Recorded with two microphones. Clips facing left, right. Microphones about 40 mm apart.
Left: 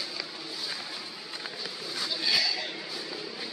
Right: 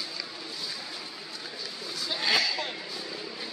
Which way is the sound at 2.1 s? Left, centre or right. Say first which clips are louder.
Right 2 dB; right.